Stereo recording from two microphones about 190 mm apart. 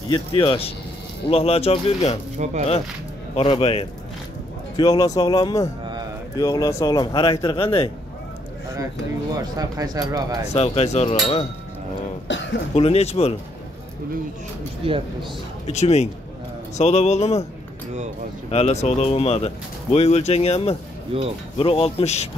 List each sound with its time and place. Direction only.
0.1 s speech: 25° left (ahead or behind)
2.3 s speech: 35° right (ahead or behind)
3.3 s speech: 30° left (ahead or behind)
4.7 s speech: 20° left (ahead or behind)
9.6 s speech: 20° right (ahead or behind)
10.5 s speech: 35° left (ahead or behind)
12.3 s throat clearing: 75° left (ahead or behind)
12.7 s speech: 35° left (ahead or behind)
14.8 s speech: 30° right (ahead or behind)
15.7 s speech: 35° left (ahead or behind)
18.5 s speech: 35° left (ahead or behind)